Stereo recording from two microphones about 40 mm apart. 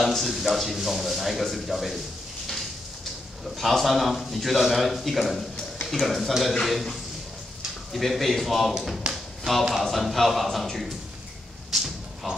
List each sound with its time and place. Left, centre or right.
0.0 s speech: centre
3.4 s speech: centre
9.0 s tap: right
9.7 s speech: centre
11.7 s a sound: centre